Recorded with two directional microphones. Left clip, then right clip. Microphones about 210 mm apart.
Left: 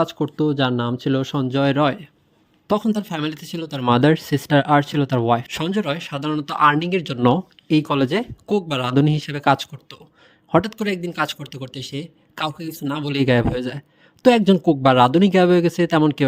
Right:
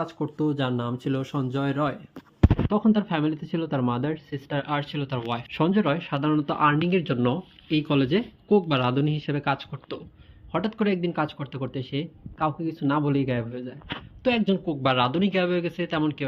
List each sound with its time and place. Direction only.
0.0 s speech: 30° left (ahead or behind); by 2.0 s 45° left (ahead or behind)
2.6 s speech: 60° left (ahead or behind)
2.9 s speech: centre (ahead or behind)
3.2 s speech: 60° left (ahead or behind)